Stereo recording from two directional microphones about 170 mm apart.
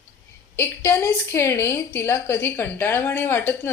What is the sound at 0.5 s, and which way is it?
A woman's voice, 15° left (ahead or behind).